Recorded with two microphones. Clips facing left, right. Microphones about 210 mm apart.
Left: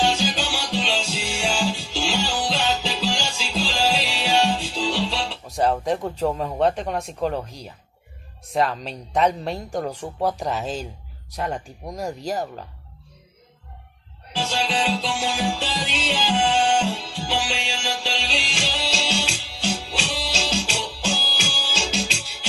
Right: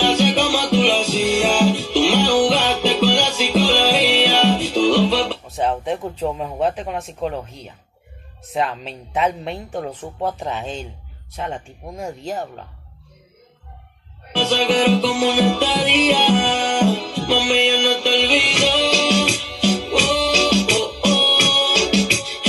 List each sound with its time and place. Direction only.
0.0 s music: 70° right (ahead or behind)
5.5 s speech: centre (ahead or behind)
8.5 s speech: centre (ahead or behind)
14.3 s music: 70° right (ahead or behind)